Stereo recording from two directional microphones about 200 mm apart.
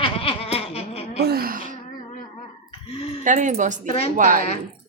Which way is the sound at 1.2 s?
50° right (ahead or behind).